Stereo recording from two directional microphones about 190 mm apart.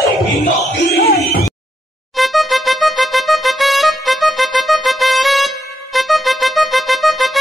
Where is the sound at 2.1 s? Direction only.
Centre (ahead or behind).